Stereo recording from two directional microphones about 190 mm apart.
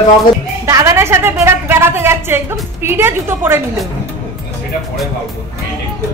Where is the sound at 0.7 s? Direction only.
15° right (ahead or behind).